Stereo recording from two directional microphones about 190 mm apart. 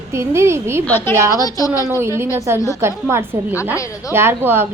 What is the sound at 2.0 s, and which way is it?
A woman's voice, 15° right (ahead or behind).